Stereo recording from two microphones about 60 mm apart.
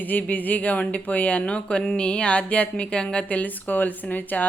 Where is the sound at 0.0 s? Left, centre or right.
Left.